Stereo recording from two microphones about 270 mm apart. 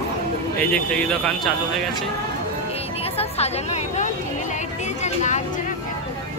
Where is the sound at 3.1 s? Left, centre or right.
Left.